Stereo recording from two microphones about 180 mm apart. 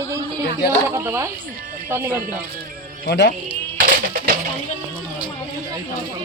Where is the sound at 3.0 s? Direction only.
75° left (ahead or behind).